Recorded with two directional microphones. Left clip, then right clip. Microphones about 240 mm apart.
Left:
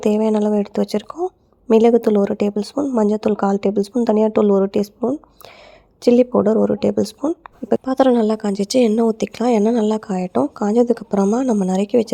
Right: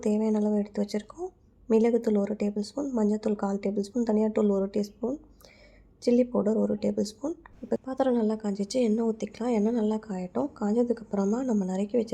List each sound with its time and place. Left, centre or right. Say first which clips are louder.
0.0 s speech: left 10 dB; left